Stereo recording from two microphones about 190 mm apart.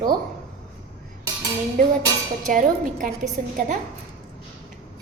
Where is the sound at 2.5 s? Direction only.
45° right (ahead or behind).